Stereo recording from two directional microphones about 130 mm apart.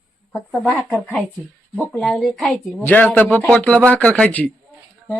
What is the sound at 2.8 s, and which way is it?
Speech, 10° left (ahead or behind).